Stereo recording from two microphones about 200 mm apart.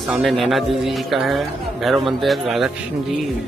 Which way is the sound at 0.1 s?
Centre (ahead or behind).